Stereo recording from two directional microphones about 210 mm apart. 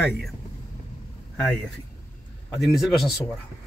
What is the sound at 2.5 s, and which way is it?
Speech, centre (ahead or behind).